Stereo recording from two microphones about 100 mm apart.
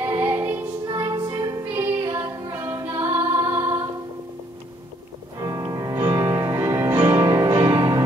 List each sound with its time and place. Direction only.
0.0 s music: 25° right (ahead or behind)
0.8 s music: 45° right (ahead or behind)
1.7 s music: 25° right (ahead or behind)
2.2 s music: 35° right (ahead or behind)
5.4 s music: 40° right (ahead or behind)